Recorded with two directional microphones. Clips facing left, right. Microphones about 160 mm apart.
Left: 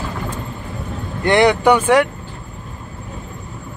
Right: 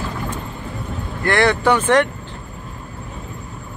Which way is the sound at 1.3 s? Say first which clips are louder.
Left 4 dB; 15° left (ahead or behind).